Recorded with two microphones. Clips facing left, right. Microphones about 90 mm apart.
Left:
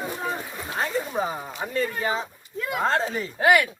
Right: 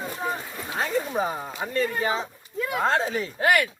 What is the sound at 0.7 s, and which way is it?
Speech, centre (ahead or behind).